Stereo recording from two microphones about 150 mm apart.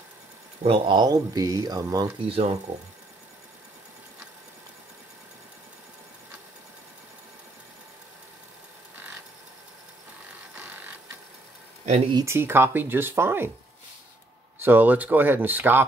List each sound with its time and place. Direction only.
0.7 s speech: 30° right (ahead or behind)
2.1 s speech: 40° right (ahead or behind)
12.1 s speech: 25° right (ahead or behind)
12.4 s speech: 15° right (ahead or behind)
14.6 s speech: 10° right (ahead or behind)